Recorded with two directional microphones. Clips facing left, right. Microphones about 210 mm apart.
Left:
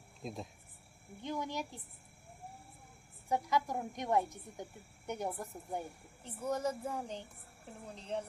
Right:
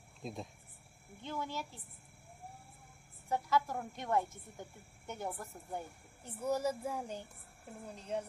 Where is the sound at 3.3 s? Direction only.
15° left (ahead or behind).